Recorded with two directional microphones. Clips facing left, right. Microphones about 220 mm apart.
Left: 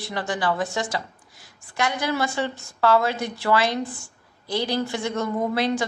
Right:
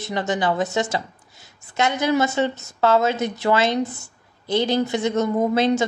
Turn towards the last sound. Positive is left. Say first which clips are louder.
# right 5 dB
turn(degrees=-25)  # may be behind; listen again after turning